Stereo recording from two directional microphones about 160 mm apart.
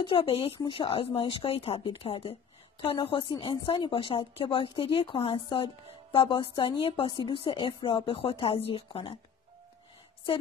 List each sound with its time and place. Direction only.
0.0 s a woman's voice: 35° left (ahead or behind)